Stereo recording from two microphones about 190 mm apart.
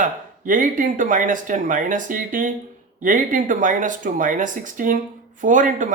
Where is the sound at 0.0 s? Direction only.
45° right (ahead or behind).